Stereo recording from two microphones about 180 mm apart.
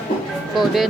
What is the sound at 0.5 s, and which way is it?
Speech, centre (ahead or behind).